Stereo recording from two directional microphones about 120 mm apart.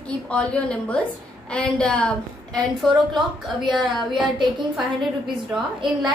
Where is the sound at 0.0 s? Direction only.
10° left (ahead or behind).